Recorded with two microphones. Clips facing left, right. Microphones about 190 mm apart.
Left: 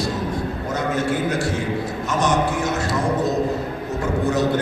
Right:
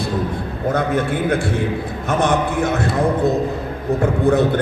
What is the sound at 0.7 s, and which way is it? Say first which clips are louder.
A man's voice: right 2 dB; 55° right (ahead or behind).